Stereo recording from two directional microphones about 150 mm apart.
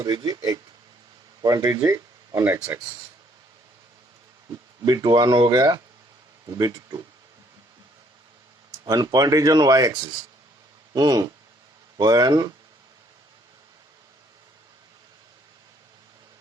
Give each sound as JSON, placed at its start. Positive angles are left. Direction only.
{"t": 0.0, "sound": "speech", "side_deg": -25}
{"t": 4.8, "sound": "speech", "side_deg": -25}
{"t": 8.8, "sound": "speech", "side_deg": -25}